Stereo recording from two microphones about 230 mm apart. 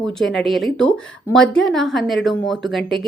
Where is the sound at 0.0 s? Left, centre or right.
Centre.